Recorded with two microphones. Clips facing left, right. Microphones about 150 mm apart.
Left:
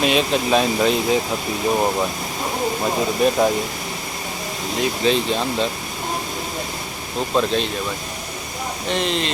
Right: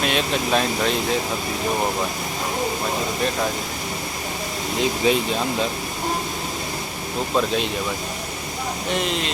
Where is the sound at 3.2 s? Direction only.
10° left (ahead or behind).